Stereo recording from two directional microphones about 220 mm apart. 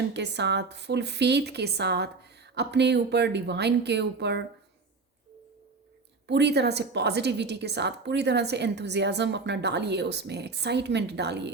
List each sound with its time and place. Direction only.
0.1 s a woman's voice: 50° right (ahead or behind)
6.2 s a woman's voice: 50° right (ahead or behind)